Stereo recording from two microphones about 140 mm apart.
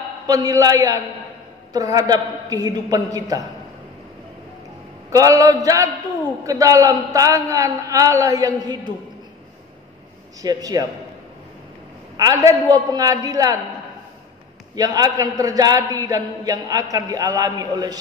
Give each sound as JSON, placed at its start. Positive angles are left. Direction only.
{"t": 0.3, "sound": "a man's voice", "side_deg": -25}
{"t": 5.1, "sound": "a man's voice", "side_deg": -25}
{"t": 10.4, "sound": "a man's voice", "side_deg": -25}
{"t": 12.2, "sound": "a man's voice", "side_deg": -25}
{"t": 14.8, "sound": "a man's voice", "side_deg": -25}